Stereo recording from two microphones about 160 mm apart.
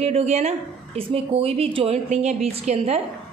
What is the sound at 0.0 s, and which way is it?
Speech, 45° right (ahead or behind).